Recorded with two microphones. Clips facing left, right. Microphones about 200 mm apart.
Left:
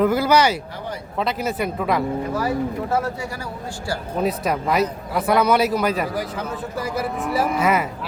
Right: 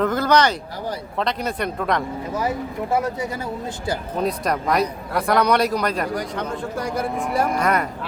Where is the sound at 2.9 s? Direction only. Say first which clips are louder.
Right 1 dB; 20° right (ahead or behind).